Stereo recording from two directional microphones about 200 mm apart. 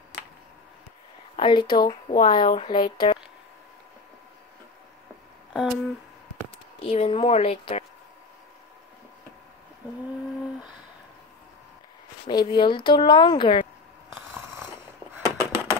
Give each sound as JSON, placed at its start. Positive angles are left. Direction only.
{"t": 1.3, "sound": "speech", "side_deg": 25}
{"t": 5.5, "sound": "speech", "side_deg": 0}
{"t": 6.8, "sound": "speech", "side_deg": 30}
{"t": 12.3, "sound": "speech", "side_deg": 20}
{"t": 14.3, "sound": "biting", "side_deg": -15}
{"t": 15.2, "sound": "a sound", "side_deg": -15}